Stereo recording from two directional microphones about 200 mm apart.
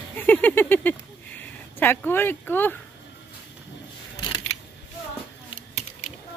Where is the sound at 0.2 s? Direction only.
10° left (ahead or behind).